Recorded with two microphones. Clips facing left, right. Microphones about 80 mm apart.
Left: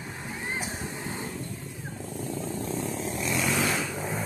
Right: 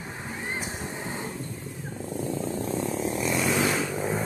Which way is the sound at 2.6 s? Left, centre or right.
Centre.